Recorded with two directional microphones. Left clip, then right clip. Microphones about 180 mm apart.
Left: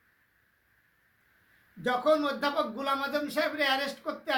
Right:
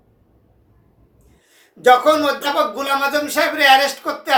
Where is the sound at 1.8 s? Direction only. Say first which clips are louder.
Right 14 dB; 10° left (ahead or behind).